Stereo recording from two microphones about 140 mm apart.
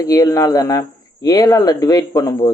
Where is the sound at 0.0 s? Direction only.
25° left (ahead or behind).